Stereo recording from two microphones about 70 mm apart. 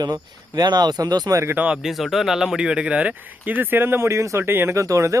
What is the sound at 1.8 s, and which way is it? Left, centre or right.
Speech, centre.